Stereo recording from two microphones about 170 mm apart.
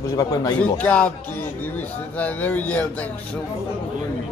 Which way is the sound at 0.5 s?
10° left (ahead or behind).